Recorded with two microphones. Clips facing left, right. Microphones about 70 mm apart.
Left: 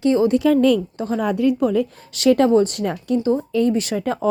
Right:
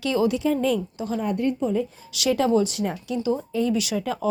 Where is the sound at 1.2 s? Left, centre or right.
Left.